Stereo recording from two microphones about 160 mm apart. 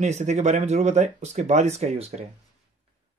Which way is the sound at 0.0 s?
45° right (ahead or behind).